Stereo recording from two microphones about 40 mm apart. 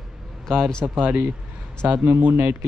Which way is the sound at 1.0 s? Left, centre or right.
Right.